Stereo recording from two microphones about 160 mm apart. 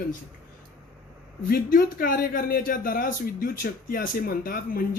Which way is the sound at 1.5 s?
65° left (ahead or behind).